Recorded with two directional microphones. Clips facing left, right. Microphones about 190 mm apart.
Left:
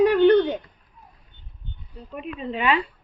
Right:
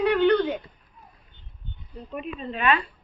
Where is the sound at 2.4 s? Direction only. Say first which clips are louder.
Left 2 dB; 20° left (ahead or behind).